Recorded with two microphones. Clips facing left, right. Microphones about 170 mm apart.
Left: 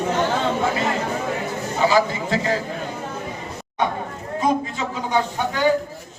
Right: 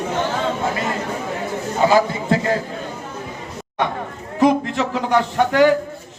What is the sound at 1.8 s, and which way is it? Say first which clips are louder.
Speech: right 3 dB; 50° right (ahead or behind).